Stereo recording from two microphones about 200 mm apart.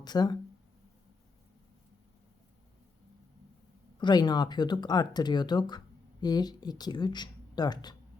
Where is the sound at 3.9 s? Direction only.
20° left (ahead or behind).